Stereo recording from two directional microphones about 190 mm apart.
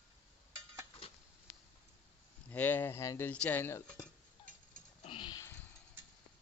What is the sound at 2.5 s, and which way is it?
A man's voice, 10° left (ahead or behind).